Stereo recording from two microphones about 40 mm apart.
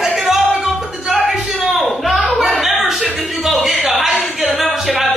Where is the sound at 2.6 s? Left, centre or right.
Centre.